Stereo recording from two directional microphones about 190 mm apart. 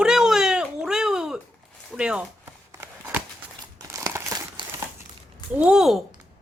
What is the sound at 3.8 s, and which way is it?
Crumpling, 15° right (ahead or behind).